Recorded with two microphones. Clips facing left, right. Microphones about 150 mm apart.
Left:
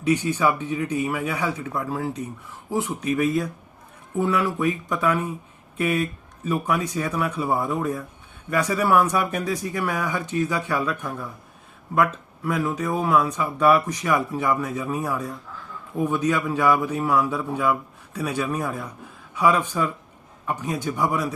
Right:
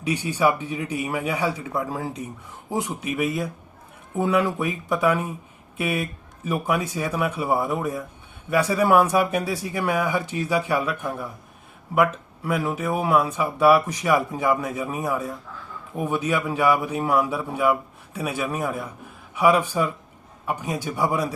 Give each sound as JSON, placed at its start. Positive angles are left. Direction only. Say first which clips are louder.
{"t": 0.0, "sound": "speech", "louder": "left 1 dB", "side_deg": -10}
{"t": 11.9, "sound": "speech", "louder": "right 1 dB", "side_deg": -10}